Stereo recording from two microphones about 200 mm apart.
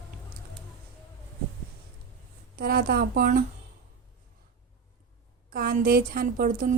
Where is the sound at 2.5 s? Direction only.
50° right (ahead or behind).